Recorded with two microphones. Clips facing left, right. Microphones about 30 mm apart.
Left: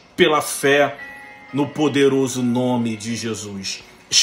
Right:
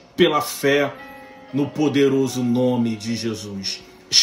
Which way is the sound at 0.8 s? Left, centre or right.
Left.